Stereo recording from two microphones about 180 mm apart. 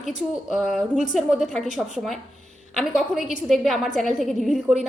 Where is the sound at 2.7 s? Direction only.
Centre (ahead or behind).